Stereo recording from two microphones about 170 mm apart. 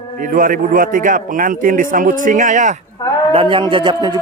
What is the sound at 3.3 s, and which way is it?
Speech, 30° right (ahead or behind).